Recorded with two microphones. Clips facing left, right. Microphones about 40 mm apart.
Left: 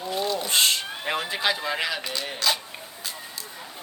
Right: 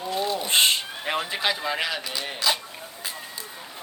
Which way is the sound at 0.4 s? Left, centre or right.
Right.